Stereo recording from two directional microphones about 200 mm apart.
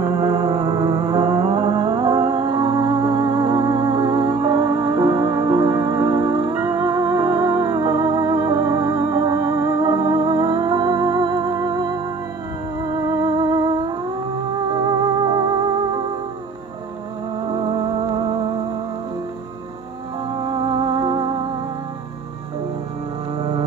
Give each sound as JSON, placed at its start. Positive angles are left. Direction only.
{"t": 0.0, "sound": "music", "side_deg": -25}
{"t": 17.5, "sound": "music", "side_deg": -25}
{"t": 20.3, "sound": "music", "side_deg": -25}